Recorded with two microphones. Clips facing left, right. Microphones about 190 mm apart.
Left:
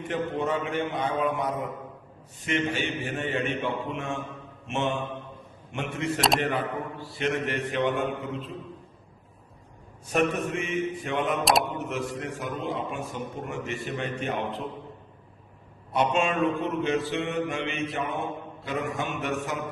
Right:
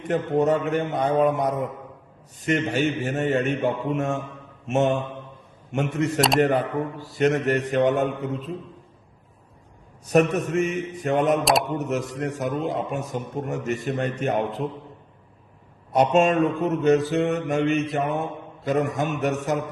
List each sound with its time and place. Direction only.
0.0 s a man's voice: 40° right (ahead or behind)
2.4 s mantra: 40° right (ahead or behind)
4.7 s a man's voice: 40° right (ahead or behind)
6.4 s mantra: 45° right (ahead or behind)
10.1 s mantra: 40° right (ahead or behind)
15.9 s mantra: 40° right (ahead or behind)
19.2 s a man's voice: 40° right (ahead or behind)